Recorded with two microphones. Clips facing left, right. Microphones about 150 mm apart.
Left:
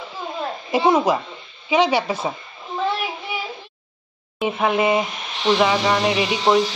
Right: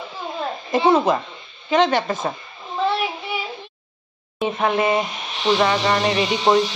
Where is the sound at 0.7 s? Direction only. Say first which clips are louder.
Right 1 dB; 10° left (ahead or behind).